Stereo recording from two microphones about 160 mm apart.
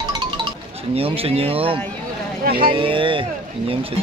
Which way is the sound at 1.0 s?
35° right (ahead or behind).